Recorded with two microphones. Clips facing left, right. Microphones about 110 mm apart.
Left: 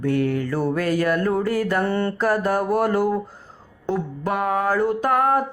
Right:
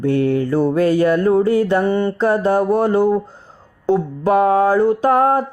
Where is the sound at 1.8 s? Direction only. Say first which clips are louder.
Right 5 dB; 15° right (ahead or behind).